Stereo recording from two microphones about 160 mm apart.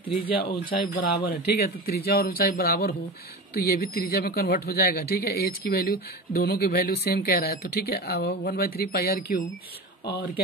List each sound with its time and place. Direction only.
0.1 s speech: 35° left (ahead or behind)
1.2 s speech: 70° left (ahead or behind)